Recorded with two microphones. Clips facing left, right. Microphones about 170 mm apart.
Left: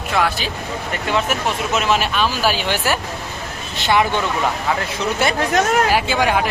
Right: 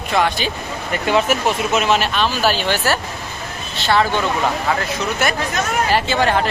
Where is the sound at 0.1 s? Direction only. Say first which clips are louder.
Right 2 dB; 5° left (ahead or behind).